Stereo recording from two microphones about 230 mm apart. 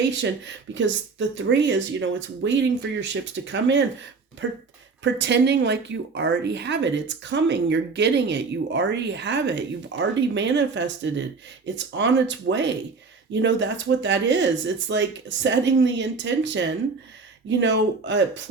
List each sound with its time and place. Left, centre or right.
0.2 s a woman's voice: right